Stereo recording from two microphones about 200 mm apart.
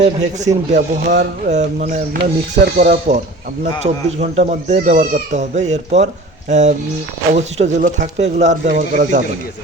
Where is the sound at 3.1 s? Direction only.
40° right (ahead or behind).